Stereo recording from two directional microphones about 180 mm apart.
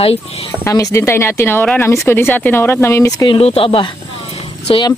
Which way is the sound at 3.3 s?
30° left (ahead or behind).